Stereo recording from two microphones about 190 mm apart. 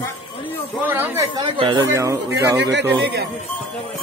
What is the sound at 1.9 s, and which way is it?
Speech, 15° right (ahead or behind).